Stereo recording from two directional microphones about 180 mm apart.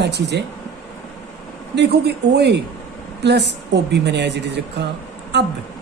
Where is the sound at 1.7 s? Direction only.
65° right (ahead or behind).